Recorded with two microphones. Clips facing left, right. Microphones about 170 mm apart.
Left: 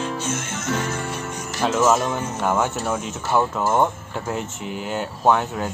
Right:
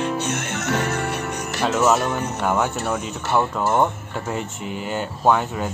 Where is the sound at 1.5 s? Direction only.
Centre (ahead or behind).